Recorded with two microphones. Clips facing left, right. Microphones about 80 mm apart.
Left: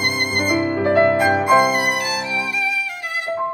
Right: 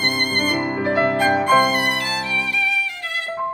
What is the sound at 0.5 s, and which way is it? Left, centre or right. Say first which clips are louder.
Music: left 3 dB; right.